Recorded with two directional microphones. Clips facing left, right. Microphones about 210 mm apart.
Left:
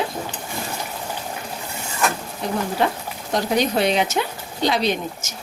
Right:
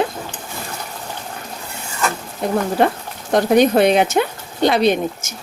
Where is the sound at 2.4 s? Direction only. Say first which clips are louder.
Right 5 dB; 55° right (ahead or behind).